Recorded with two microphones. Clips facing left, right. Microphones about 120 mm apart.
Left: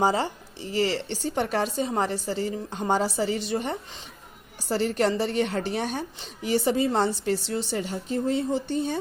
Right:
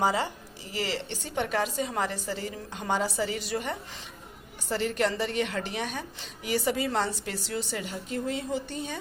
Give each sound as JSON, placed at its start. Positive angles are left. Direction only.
{"t": 0.0, "sound": "a woman's voice", "side_deg": 30}